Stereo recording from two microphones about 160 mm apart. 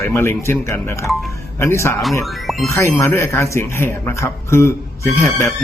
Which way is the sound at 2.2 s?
Centre (ahead or behind).